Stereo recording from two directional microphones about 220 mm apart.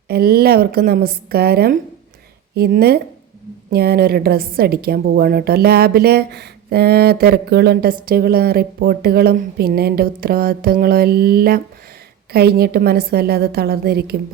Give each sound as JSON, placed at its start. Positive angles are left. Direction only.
{"t": 0.1, "sound": "a woman's voice", "side_deg": -45}